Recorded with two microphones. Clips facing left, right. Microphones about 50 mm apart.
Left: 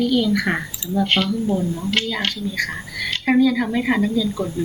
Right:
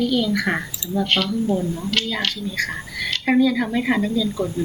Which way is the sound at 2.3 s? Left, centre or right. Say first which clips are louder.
Left 1 dB; centre.